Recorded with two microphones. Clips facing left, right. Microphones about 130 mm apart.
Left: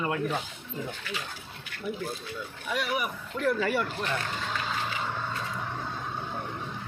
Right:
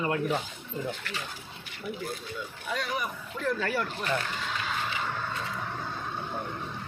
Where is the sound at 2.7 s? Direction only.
5° left (ahead or behind).